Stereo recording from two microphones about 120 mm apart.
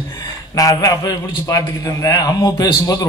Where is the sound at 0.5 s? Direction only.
30° left (ahead or behind).